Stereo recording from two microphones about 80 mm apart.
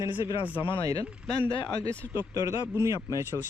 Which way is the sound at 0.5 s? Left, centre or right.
Left.